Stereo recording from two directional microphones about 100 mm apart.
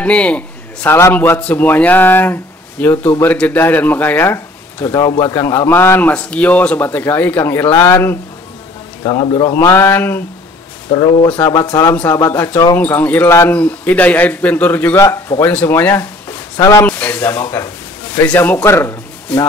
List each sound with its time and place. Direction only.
0.0 s a sound: 10° left (ahead or behind)
0.8 s speech: 25° left (ahead or behind)
4.8 s speech: 35° left (ahead or behind)
9.0 s speech: 55° left (ahead or behind)
9.6 s speech: 25° left (ahead or behind)
10.9 s speech: 50° left (ahead or behind)
12.3 s a man's voice: 20° left (ahead or behind)
15.0 s speech: 30° left (ahead or behind)
15.4 s speech: 20° left (ahead or behind)
16.5 s speech: 40° left (ahead or behind)
16.8 s speech: 15° left (ahead or behind)